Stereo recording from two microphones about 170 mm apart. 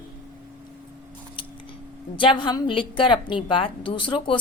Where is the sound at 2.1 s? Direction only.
30° left (ahead or behind).